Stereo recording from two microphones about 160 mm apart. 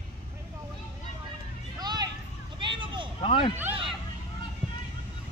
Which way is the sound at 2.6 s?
30° right (ahead or behind).